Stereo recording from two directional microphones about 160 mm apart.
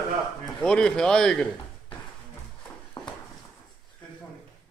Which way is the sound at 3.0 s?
25° left (ahead or behind).